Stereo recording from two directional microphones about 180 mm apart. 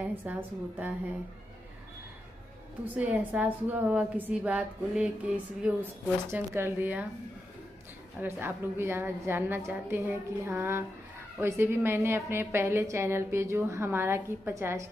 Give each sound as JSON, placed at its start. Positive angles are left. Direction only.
{"t": 0.0, "sound": "a woman's voice", "side_deg": -10}
{"t": 3.0, "sound": "a woman's voice", "side_deg": -5}
{"t": 8.2, "sound": "a woman's voice", "side_deg": -10}